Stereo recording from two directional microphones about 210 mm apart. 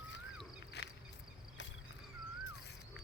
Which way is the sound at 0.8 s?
50° left (ahead or behind).